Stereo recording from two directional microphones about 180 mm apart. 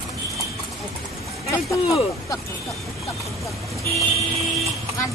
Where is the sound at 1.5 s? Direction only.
20° left (ahead or behind).